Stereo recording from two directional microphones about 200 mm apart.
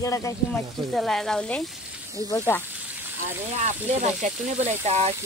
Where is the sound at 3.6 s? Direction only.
35° right (ahead or behind).